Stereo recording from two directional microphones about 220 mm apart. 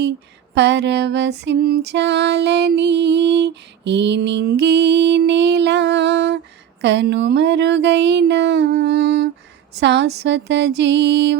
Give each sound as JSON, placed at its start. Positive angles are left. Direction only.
{"t": 0.5, "sound": "music", "side_deg": -50}